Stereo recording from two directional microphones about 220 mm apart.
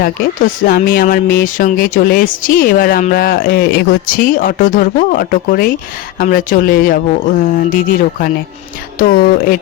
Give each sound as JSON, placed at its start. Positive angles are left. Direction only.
{"t": 0.0, "sound": "speech", "side_deg": 40}